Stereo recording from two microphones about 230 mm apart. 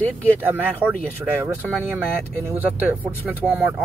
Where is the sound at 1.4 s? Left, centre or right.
Centre.